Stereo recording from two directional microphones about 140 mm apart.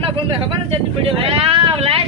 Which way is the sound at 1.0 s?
40° right (ahead or behind).